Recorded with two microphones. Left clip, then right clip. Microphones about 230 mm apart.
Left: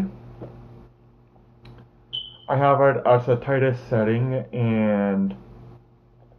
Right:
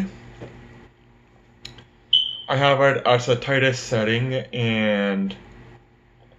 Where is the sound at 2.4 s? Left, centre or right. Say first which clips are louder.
Left 5 dB; centre.